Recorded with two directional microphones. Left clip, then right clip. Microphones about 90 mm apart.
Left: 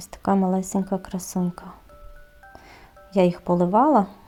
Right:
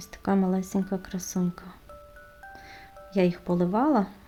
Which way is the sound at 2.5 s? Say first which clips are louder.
Right 1 dB; 30° left (ahead or behind).